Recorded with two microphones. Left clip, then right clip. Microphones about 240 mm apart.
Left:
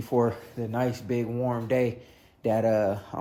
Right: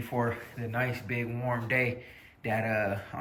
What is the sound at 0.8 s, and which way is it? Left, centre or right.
Speech, centre.